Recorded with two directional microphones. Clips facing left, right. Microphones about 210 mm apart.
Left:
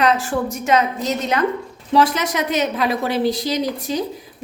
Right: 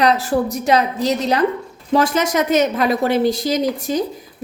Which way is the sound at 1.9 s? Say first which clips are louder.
Right 1 dB; 45° right (ahead or behind).